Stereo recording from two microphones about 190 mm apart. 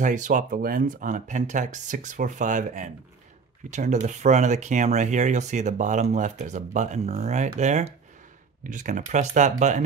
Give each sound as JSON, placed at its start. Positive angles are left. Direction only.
{"t": 0.0, "sound": "speech", "side_deg": -45}